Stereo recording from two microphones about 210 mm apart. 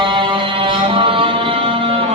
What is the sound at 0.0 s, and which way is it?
Music, 25° right (ahead or behind).